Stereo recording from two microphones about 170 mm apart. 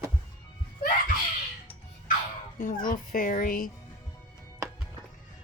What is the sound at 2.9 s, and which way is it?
Speech, 55° left (ahead or behind).